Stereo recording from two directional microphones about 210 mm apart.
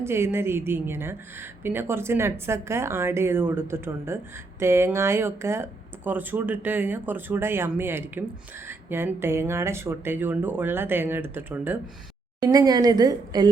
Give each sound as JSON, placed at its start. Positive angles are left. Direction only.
{"t": 0.0, "sound": "a woman's voice", "side_deg": -10}